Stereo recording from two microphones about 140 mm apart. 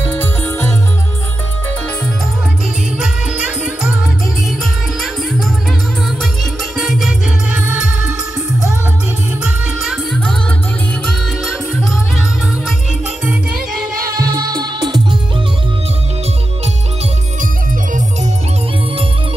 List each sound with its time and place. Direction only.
0.0 s music: 15° left (ahead or behind)
3.0 s music: 10° right (ahead or behind)
6.8 s music: 5° right (ahead or behind)
9.4 s music: 5° right (ahead or behind)
14.0 s music: 25° right (ahead or behind)